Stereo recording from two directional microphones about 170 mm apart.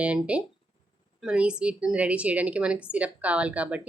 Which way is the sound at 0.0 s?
5° right (ahead or behind).